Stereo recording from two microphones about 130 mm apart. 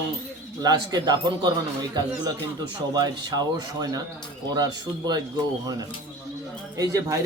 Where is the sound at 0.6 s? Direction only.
30° right (ahead or behind).